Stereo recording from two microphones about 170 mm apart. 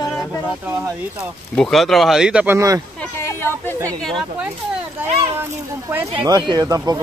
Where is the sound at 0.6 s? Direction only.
20° right (ahead or behind).